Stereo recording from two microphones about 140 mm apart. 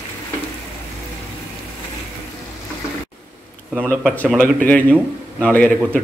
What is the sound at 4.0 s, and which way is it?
Speech, 10° left (ahead or behind).